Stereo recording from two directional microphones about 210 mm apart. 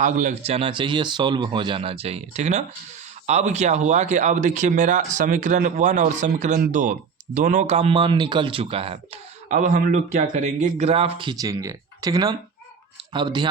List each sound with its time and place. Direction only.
0.0 s speech: 35° right (ahead or behind); by 13.5 s 20° right (ahead or behind)